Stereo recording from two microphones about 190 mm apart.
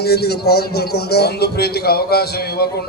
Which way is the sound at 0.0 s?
55° left (ahead or behind).